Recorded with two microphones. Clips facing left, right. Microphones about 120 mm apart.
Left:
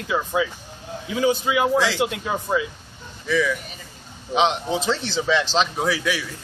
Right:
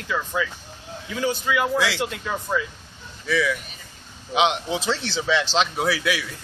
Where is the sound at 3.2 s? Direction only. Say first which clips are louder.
Left 1 dB; 5° right (ahead or behind).